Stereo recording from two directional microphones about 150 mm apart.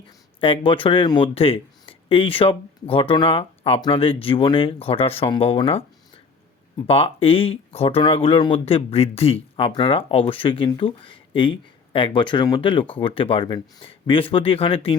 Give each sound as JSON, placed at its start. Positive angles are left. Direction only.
{"t": 0.3, "sound": "speech", "side_deg": 35}
{"t": 6.8, "sound": "speech", "side_deg": 40}